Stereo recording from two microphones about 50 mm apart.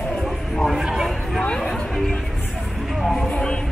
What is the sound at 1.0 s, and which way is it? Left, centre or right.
Chatter, centre.